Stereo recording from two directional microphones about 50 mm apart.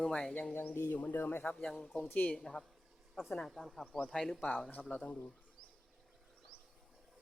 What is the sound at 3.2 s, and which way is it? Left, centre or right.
Speech, centre.